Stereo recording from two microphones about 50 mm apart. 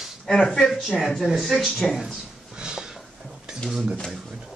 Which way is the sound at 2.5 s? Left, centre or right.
Centre.